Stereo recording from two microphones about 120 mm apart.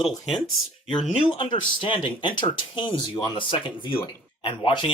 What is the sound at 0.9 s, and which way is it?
Speech, 45° left (ahead or behind).